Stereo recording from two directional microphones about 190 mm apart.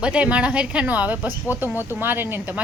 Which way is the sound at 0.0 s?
5° right (ahead or behind).